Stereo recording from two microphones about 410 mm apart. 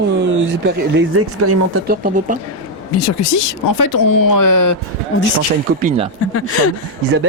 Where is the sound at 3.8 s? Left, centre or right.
Left.